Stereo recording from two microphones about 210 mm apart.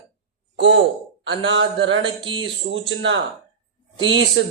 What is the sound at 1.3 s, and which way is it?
Speech, 60° right (ahead or behind).